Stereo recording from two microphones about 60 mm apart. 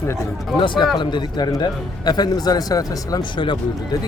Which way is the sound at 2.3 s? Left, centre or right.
Left.